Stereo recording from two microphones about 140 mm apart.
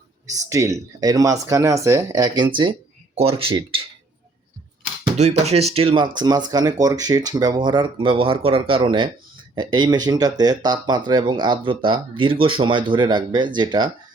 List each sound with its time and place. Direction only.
0.5 s speech: 25° right (ahead or behind); by 3.8 s 40° right (ahead or behind)
5.1 s speech: 50° right (ahead or behind); by 13.9 s 35° right (ahead or behind)